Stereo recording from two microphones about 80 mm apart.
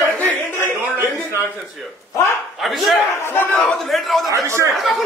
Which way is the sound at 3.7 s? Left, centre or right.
Centre.